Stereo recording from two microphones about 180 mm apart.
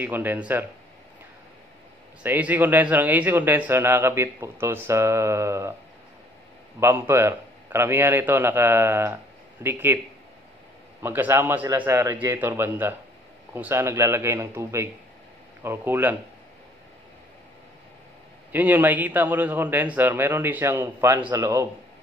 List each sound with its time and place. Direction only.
0.0 s speech: 10° right (ahead or behind)
2.2 s speech: 10° right (ahead or behind)
6.8 s a man's voice: 15° right (ahead or behind)
11.0 s speech: 10° right (ahead or behind)
18.5 s speech: 10° right (ahead or behind)